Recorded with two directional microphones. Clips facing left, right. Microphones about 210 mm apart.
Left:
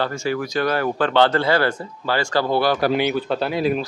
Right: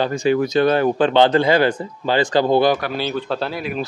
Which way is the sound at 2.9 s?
15° left (ahead or behind).